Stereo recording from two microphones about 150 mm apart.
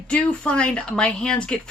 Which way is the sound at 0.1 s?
5° left (ahead or behind).